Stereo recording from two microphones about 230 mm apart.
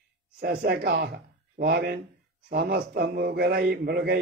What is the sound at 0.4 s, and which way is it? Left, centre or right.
A man's voice, right.